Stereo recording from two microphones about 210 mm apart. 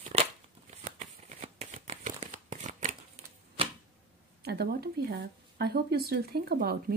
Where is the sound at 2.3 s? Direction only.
35° right (ahead or behind).